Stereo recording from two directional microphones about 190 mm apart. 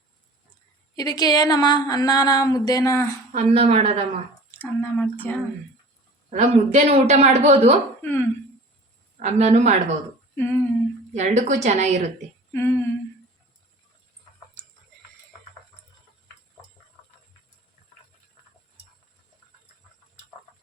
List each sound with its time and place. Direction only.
0.9 s speech: 20° left (ahead or behind)
3.3 s a woman's voice: 35° right (ahead or behind)
4.5 s speech: 10° left (ahead or behind)
6.3 s a woman's voice: 35° right (ahead or behind)
8.0 s speech: 10° left (ahead or behind)
9.1 s a woman's voice: 35° right (ahead or behind)
10.3 s speech: 10° left (ahead or behind)
11.1 s a woman's voice: 40° right (ahead or behind)
12.5 s speech: 15° left (ahead or behind)